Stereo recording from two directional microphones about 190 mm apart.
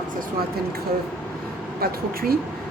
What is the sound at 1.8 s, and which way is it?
Speech, 50° right (ahead or behind).